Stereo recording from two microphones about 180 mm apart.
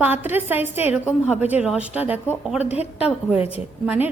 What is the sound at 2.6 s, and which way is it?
Speech, 35° left (ahead or behind).